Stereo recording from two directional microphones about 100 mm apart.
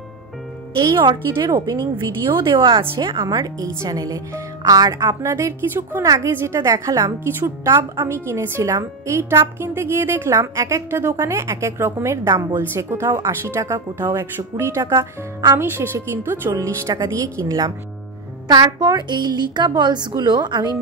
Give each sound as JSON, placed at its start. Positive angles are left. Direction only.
{"t": 0.8, "sound": "a woman's voice", "side_deg": -50}